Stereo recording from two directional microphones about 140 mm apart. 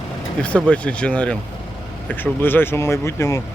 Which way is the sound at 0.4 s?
10° left (ahead or behind).